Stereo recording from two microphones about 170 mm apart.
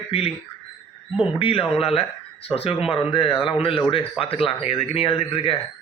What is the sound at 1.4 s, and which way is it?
Speech, 35° left (ahead or behind).